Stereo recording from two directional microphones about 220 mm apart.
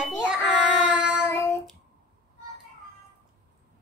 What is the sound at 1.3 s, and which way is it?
Child singing, 10° left (ahead or behind).